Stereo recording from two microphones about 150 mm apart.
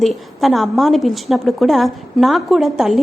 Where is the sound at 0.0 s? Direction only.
Centre (ahead or behind).